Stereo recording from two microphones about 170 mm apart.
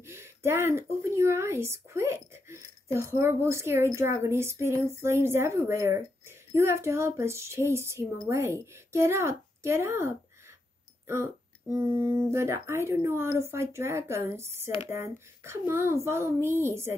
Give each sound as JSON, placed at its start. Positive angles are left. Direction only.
{"t": 0.0, "sound": "a woman's voice", "side_deg": -15}
{"t": 11.7, "sound": "a woman's voice", "side_deg": -15}